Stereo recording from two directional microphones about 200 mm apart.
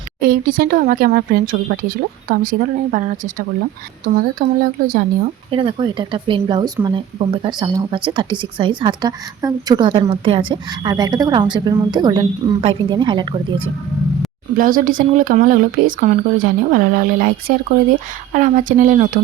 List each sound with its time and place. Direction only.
0.2 s speech: 45° right (ahead or behind)
5.5 s speech: 25° right (ahead or behind)
14.5 s speech: 45° right (ahead or behind)